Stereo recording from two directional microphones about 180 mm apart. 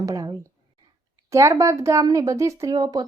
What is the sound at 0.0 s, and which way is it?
Speech, 20° right (ahead or behind).